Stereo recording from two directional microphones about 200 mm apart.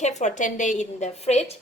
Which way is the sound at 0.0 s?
35° left (ahead or behind).